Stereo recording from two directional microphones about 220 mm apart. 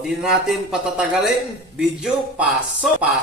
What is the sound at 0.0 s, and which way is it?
Speech, centre (ahead or behind).